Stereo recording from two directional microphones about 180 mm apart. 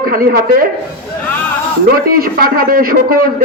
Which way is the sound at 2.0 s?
55° right (ahead or behind).